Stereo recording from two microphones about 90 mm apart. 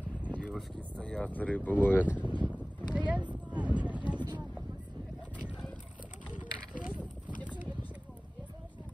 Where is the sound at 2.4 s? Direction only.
15° right (ahead or behind).